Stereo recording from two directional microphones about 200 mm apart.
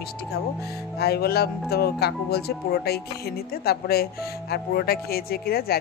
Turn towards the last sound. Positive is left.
turn(degrees=50)  # may be behind; listen again after turning